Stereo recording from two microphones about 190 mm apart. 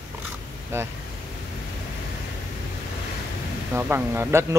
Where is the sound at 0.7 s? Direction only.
15° right (ahead or behind).